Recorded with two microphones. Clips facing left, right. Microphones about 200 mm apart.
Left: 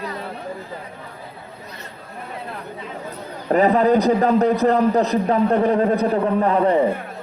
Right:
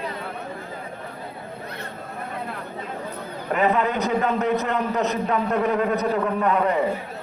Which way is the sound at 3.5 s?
35° left (ahead or behind).